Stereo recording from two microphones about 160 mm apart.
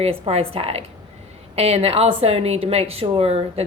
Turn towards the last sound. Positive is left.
turn(degrees=-40)  # may be behind; listen again after turning